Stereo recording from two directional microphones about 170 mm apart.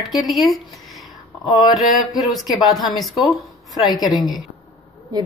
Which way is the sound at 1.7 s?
Centre (ahead or behind).